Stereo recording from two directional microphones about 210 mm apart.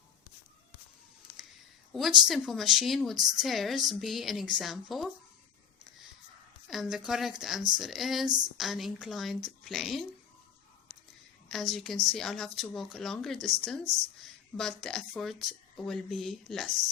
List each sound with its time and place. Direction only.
1.9 s a woman's voice: centre (ahead or behind)
6.7 s a woman's voice: centre (ahead or behind)
11.4 s a woman's voice: centre (ahead or behind)